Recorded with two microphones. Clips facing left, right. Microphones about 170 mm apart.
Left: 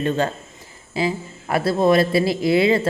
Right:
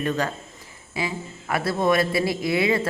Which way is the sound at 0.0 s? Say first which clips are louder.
Left 4 dB; 25° left (ahead or behind).